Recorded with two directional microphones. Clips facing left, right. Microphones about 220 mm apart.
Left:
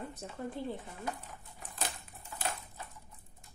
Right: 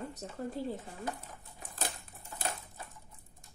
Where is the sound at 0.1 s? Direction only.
40° right (ahead or behind).